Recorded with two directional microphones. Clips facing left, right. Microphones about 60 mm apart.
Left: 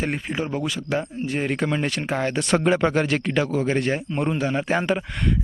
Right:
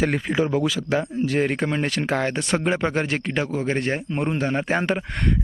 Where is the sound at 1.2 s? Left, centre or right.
Right.